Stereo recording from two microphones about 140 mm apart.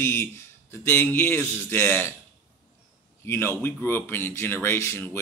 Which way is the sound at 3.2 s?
15° left (ahead or behind).